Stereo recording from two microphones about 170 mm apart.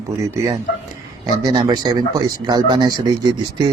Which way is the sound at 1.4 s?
25° right (ahead or behind).